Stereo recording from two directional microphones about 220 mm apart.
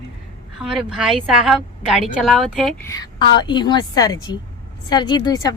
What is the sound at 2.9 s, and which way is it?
A woman's voice, 20° left (ahead or behind).